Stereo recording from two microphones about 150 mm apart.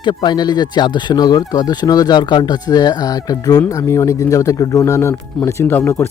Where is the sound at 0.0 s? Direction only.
30° left (ahead or behind).